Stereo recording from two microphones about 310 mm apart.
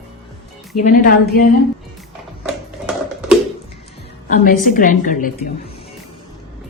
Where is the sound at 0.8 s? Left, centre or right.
Left.